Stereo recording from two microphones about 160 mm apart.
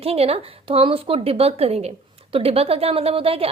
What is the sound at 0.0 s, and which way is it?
A woman's voice, 40° right (ahead or behind).